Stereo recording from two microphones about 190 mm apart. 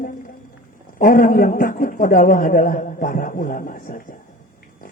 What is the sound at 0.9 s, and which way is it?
A man's voice, 45° left (ahead or behind).